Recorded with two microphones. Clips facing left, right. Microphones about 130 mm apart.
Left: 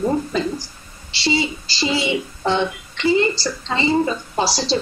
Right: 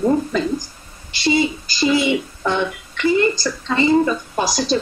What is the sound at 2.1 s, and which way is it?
A woman's voice, 20° left (ahead or behind).